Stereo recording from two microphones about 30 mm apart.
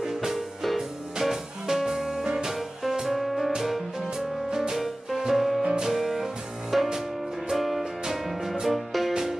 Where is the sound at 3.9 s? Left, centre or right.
Centre.